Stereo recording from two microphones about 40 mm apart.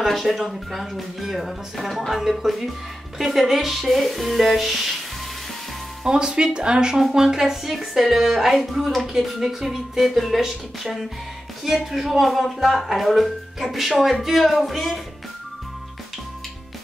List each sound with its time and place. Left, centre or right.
0.0 s speech: centre
6.0 s speech: centre